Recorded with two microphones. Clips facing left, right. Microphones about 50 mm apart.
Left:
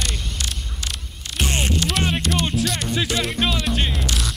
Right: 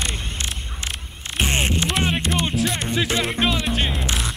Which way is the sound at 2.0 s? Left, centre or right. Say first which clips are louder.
Even; right.